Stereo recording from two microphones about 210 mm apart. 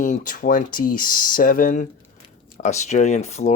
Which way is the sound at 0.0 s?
40° left (ahead or behind).